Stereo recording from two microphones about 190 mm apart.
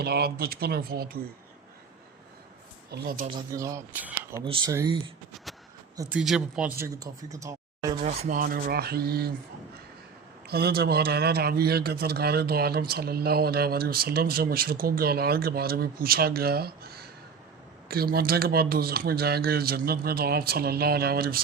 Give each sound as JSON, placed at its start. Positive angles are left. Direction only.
{"t": 0.0, "sound": "speech", "side_deg": -55}
{"t": 2.9, "sound": "speech", "side_deg": -50}
{"t": 3.2, "sound": "speech", "side_deg": -20}
{"t": 4.4, "sound": "speech", "side_deg": -25}
{"t": 5.5, "sound": "a sound", "side_deg": 0}
{"t": 6.0, "sound": "speech", "side_deg": -5}
{"t": 8.0, "sound": "speech", "side_deg": -40}
{"t": 10.4, "sound": "speech", "side_deg": -55}